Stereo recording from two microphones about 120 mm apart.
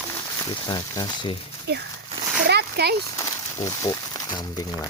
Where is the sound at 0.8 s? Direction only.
30° left (ahead or behind).